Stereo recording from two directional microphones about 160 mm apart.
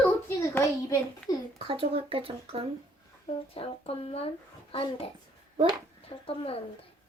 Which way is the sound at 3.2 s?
35° left (ahead or behind).